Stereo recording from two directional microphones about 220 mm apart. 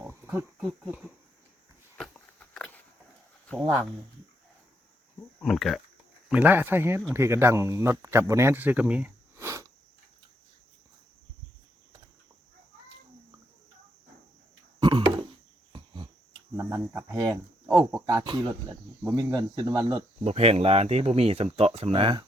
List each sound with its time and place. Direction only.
0.1 s speech: 10° right (ahead or behind)
2.0 s a sound: 5° left (ahead or behind)
3.6 s speech: 10° right (ahead or behind)
5.4 s speech: centre (ahead or behind)
14.8 s a sound: 20° right (ahead or behind)
16.6 s speech: 5° right (ahead or behind)